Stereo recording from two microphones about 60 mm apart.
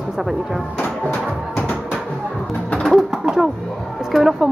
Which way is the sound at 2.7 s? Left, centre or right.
Centre.